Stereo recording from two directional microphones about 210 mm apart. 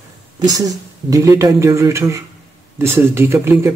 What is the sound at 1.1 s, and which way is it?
Speech, 15° right (ahead or behind).